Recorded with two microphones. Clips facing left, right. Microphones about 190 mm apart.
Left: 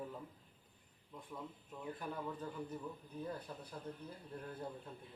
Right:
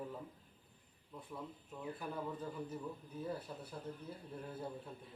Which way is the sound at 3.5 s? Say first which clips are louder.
Right 1 dB; 5° right (ahead or behind).